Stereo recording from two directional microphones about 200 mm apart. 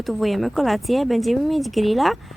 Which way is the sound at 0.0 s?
Centre (ahead or behind).